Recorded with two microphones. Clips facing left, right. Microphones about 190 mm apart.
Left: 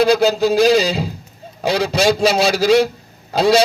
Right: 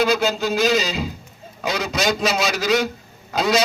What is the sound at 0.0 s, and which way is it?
A man's voice, 35° left (ahead or behind).